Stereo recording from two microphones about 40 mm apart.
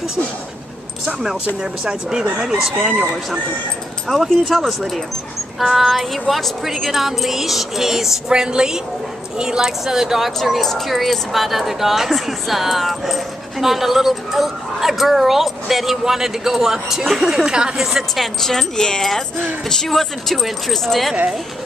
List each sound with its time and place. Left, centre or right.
1.0 s speech: centre
4.1 s speech: centre
8.3 s speech: centre
17.5 s speech: right
17.7 s speech: centre
18.4 s speech: centre